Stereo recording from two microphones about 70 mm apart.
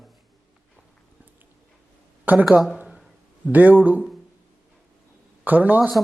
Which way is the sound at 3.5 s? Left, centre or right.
Right.